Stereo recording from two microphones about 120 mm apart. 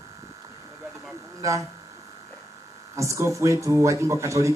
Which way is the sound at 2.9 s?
25° right (ahead or behind).